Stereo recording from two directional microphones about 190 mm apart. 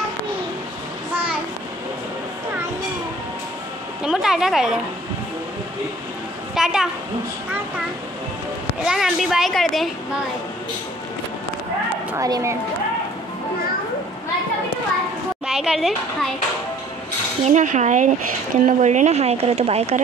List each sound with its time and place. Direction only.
4.0 s a woman's voice: 5° right (ahead or behind)
6.5 s a woman's voice: centre (ahead or behind)
8.8 s a woman's voice: centre (ahead or behind)
12.1 s a woman's voice: 15° right (ahead or behind)
15.4 s a child's voice: 5° right (ahead or behind)
17.5 s a woman's voice: 40° right (ahead or behind)